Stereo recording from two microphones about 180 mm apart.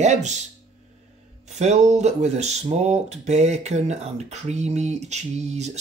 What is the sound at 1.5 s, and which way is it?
Speech, 40° right (ahead or behind).